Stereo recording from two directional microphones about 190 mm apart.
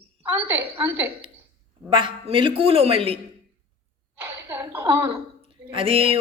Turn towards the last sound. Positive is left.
turn(degrees=-30)  # may be behind; listen again after turning